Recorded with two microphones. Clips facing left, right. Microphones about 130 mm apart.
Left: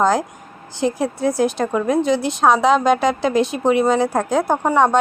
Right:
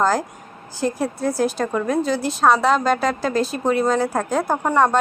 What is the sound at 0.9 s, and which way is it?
Speech, 10° left (ahead or behind).